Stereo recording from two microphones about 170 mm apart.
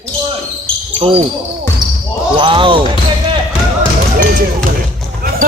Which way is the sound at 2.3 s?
30° right (ahead or behind).